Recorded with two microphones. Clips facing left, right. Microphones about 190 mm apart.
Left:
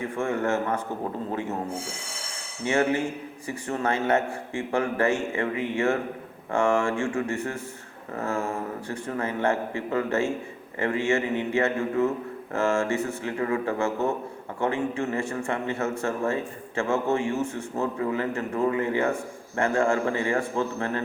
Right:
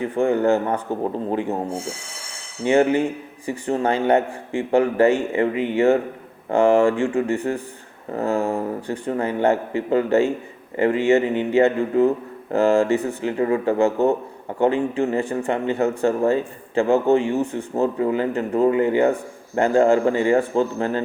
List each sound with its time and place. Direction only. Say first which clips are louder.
0.0 s a man's voice: right 8 dB; 35° right (ahead or behind)
2.6 s a man's voice: right 7 dB; 30° right (ahead or behind)